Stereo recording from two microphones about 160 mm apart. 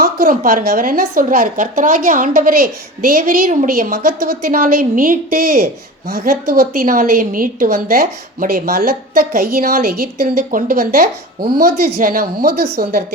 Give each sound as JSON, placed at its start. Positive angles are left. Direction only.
{"t": 0.0, "sound": "a woman's voice", "side_deg": -65}